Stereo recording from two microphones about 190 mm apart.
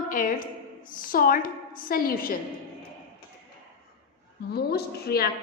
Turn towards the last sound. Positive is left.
turn(degrees=55)  # may be behind; listen again after turning